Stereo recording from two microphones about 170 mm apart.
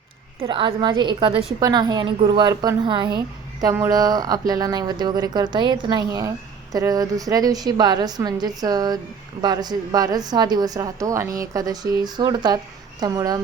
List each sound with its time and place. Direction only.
0.4 s a woman's voice: 30° right (ahead or behind)